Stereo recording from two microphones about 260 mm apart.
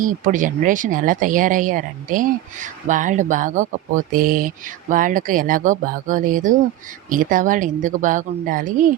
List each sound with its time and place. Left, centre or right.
0.0 s speech: right